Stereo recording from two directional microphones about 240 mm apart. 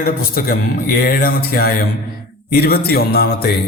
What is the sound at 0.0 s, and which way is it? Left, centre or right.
A man's voice, left.